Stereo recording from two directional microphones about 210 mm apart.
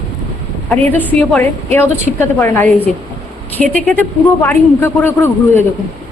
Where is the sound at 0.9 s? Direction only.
10° left (ahead or behind).